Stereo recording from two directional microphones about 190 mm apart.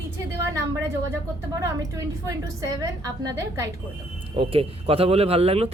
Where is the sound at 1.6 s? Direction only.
15° right (ahead or behind).